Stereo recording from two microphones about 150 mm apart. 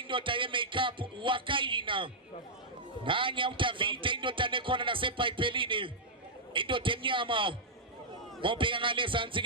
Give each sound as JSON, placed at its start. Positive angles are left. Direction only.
{"t": 0.1, "sound": "a man's voice", "side_deg": -35}